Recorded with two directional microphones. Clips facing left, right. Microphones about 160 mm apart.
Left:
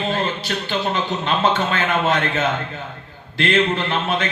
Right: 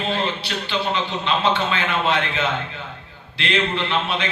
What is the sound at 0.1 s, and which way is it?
A man's voice, 45° left (ahead or behind).